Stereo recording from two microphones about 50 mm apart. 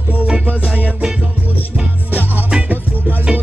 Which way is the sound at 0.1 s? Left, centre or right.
Right.